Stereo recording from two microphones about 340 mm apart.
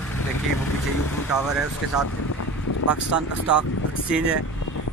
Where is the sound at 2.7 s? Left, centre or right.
Left.